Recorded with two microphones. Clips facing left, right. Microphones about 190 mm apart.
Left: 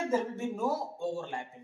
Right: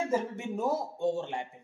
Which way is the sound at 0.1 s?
20° right (ahead or behind).